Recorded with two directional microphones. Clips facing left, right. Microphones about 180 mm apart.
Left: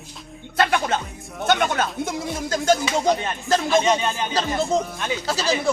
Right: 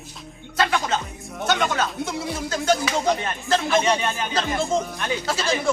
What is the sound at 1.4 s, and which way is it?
Speech, 50° left (ahead or behind).